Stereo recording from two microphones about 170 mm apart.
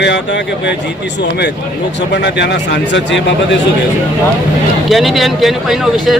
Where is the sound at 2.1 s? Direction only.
85° left.